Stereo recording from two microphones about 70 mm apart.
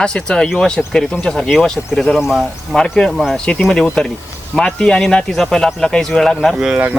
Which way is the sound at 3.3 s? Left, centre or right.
Centre.